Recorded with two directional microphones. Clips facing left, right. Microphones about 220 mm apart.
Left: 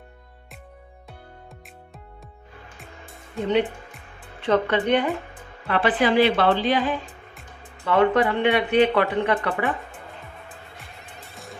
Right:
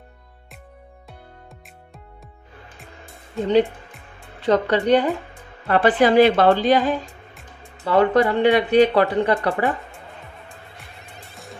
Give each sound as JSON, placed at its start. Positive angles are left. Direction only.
{"t": 4.4, "sound": "a woman's voice", "side_deg": -35}
{"t": 7.3, "sound": "music", "side_deg": 0}
{"t": 7.9, "sound": "speech", "side_deg": -40}
{"t": 11.0, "sound": "music", "side_deg": 0}